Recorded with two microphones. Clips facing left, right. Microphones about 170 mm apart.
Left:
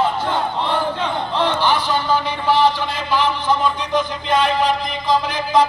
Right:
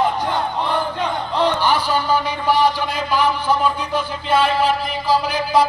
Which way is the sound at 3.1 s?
10° right (ahead or behind).